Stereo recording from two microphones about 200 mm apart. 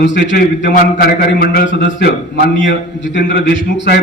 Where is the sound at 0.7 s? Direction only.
50° left (ahead or behind).